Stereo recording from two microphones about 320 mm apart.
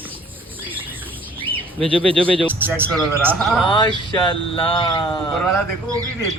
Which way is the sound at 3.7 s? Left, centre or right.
Centre.